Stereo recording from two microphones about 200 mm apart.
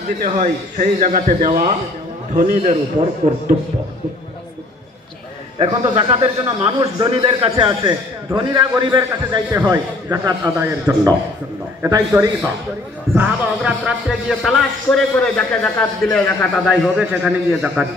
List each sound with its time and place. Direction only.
0.2 s a man's voice: 40° right (ahead or behind)
5.6 s a man's voice: 25° right (ahead or behind)
9.6 s a man's voice: 10° right (ahead or behind)
13.6 s speech: 5° right (ahead or behind)